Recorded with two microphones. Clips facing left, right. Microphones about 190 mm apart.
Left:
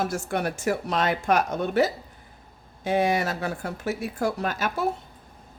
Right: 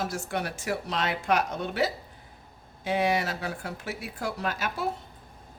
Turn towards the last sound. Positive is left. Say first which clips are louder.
# left 5 dB
turn(degrees=45)  # may be behind; listen again after turning